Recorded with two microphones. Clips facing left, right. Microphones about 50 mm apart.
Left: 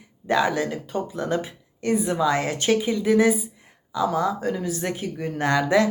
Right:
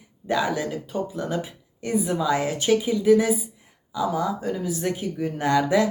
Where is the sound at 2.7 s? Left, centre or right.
Centre.